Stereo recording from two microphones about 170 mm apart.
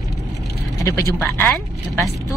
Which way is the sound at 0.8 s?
15° left (ahead or behind).